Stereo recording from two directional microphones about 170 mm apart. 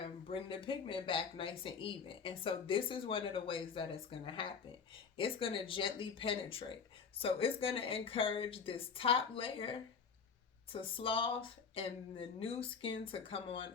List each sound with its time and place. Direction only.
0.0 s speech: 30° left (ahead or behind)